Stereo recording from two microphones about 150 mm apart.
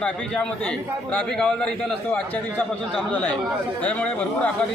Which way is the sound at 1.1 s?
5° left (ahead or behind).